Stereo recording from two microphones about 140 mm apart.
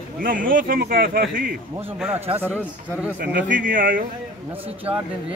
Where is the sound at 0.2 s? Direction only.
85° right.